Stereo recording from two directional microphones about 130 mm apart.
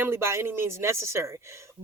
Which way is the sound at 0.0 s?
20° right (ahead or behind).